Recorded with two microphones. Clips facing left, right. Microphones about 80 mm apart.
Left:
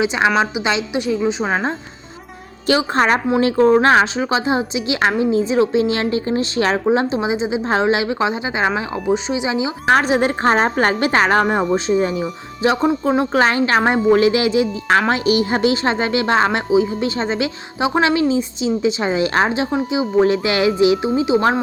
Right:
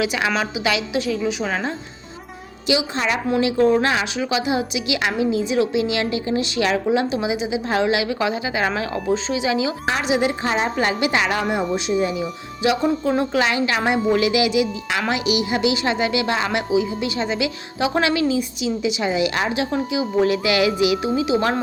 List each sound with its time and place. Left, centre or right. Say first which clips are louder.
0.0 s a woman's voice: left 5 dB; left
2.6 s a woman's voice: left 5 dB; left
9.9 s a woman's voice: left 7 dB; left